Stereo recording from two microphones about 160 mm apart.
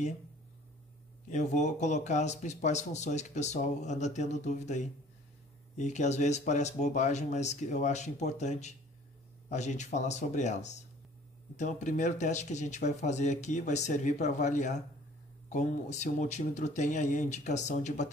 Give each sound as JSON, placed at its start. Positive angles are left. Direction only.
{"t": 1.3, "sound": "speech", "side_deg": 50}